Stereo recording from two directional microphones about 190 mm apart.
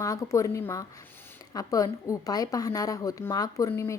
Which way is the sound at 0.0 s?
15° left (ahead or behind).